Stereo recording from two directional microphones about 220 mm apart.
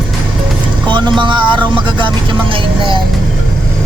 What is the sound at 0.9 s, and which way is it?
Vehicle, 20° right (ahead or behind).